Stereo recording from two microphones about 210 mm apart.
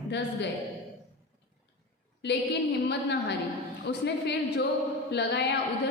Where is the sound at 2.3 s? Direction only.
55° left (ahead or behind).